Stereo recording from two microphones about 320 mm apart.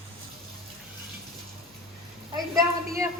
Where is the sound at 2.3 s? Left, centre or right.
Centre.